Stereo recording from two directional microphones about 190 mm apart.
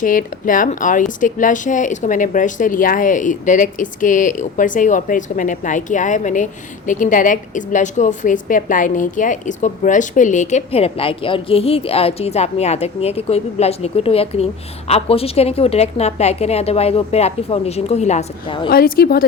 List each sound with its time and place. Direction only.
0.0 s a woman's voice: 45° left (ahead or behind); by 18.7 s 25° left (ahead or behind)
18.7 s speech: 55° left (ahead or behind)